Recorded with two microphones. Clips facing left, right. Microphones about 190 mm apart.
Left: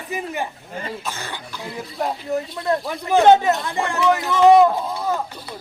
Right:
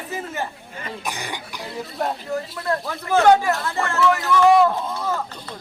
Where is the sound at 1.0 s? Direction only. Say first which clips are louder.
Right 1 dB; 15° right (ahead or behind).